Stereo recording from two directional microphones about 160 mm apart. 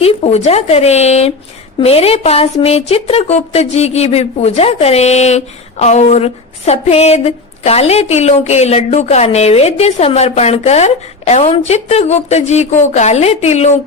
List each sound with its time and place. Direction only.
0.0 s a woman's voice: 45° left (ahead or behind)
1.8 s a sound: 40° left (ahead or behind)
11.5 s a woman's voice: 40° left (ahead or behind)